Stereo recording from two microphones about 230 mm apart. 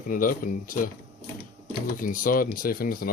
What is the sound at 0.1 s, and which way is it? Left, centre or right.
Speech, left.